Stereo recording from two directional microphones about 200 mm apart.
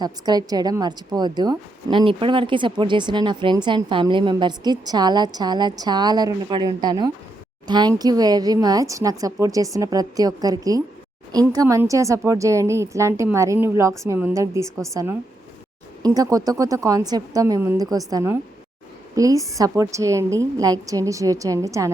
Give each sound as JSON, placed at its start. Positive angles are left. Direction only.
{"t": 0.0, "sound": "a woman's voice", "side_deg": -20}